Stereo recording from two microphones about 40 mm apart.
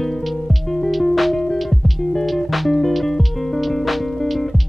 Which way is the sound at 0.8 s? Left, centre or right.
Centre.